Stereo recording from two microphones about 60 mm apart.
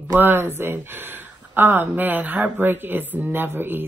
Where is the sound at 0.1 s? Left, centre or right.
Right.